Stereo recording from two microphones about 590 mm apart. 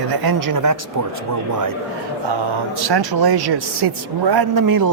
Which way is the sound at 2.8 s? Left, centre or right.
Right.